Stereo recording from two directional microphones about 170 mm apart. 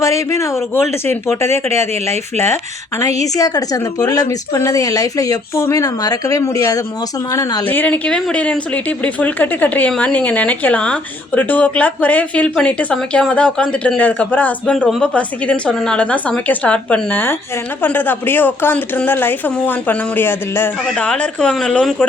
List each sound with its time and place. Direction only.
0.0 s a woman's voice: 15° left (ahead or behind)
7.7 s a woman's voice: 10° left (ahead or behind)